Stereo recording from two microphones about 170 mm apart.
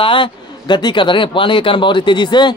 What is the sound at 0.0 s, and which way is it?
Speech, 30° left (ahead or behind).